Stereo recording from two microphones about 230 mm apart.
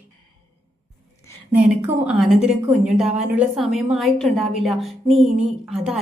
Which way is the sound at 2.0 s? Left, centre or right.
Centre.